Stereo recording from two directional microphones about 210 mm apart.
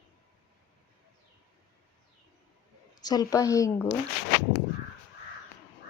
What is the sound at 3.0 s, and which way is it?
Speech, 20° left (ahead or behind).